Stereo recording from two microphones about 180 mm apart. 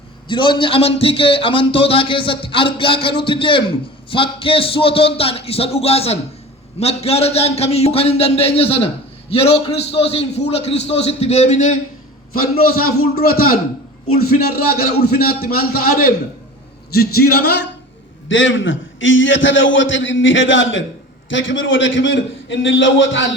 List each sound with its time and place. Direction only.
0.3 s a man's voice: 30° left (ahead or behind)
12.4 s a man's voice: 55° left (ahead or behind)
18.3 s a man's voice: 90° left